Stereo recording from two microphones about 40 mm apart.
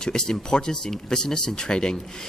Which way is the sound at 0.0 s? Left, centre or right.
Centre.